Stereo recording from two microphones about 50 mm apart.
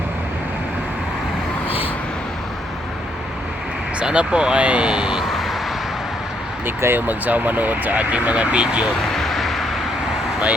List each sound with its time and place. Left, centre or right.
4.0 s speech: centre
5.3 s vehicle: centre
6.7 s speech: right; by 8.9 s centre
9.1 s vehicle: centre